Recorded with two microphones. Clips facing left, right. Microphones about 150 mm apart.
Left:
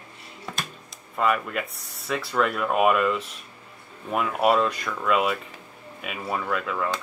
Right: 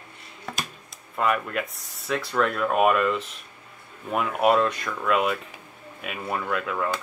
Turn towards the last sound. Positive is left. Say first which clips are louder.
# even
turn(degrees=0)  # may be behind; listen again after turning